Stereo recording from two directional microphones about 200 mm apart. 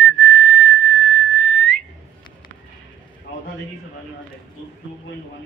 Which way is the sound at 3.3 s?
65° left (ahead or behind).